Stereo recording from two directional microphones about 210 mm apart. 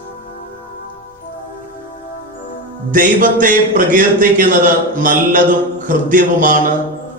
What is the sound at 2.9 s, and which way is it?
Speech, 40° right (ahead or behind).